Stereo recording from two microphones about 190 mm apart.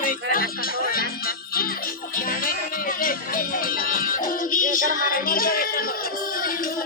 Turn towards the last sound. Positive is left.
turn(degrees=50)  # may be behind; listen again after turning